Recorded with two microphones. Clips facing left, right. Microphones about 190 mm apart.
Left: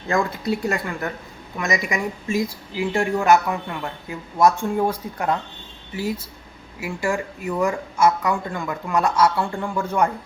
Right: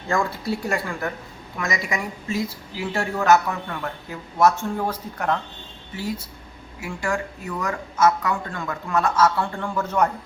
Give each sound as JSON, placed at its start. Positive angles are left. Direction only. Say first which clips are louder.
{"t": 0.1, "sound": "a woman's voice", "louder": "left 2 dB", "side_deg": 20}